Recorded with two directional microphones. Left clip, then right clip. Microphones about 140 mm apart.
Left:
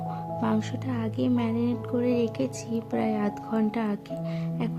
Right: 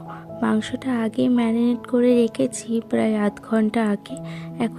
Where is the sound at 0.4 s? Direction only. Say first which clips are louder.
Right 8 dB; 35° right (ahead or behind).